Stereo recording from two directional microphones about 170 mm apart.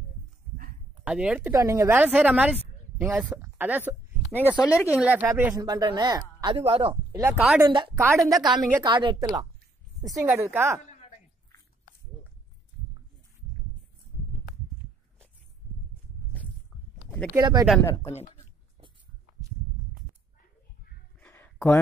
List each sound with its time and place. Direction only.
1.0 s speech: 5° right (ahead or behind)
1.5 s a woman's voice: 20° right (ahead or behind)
4.5 s speech: 15° left (ahead or behind)
5.0 s speech: 10° right (ahead or behind); by 7.0 s 35° right (ahead or behind)
7.1 s speech: 15° right (ahead or behind)
7.6 s speech: 25° right (ahead or behind)
8.2 s speech: centre (ahead or behind)
8.8 s a woman's voice: 25° right (ahead or behind)
17.3 s speech: 20° right (ahead or behind)
21.2 s a sound: 10° left (ahead or behind)